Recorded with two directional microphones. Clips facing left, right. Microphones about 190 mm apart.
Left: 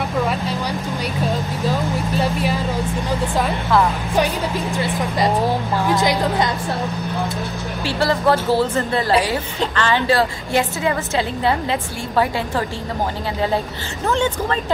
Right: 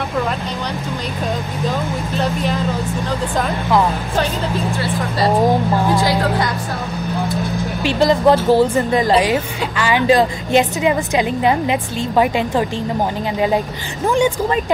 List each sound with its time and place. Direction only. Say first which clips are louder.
2.1 s vehicle: right 2 dB; 10° left (ahead or behind)
4.7 s speech: right 1 dB; 15° left (ahead or behind)
7.8 s a woman's voice: right 5 dB; 20° right (ahead or behind)
14.0 s a woman's voice: right 4 dB; 15° right (ahead or behind)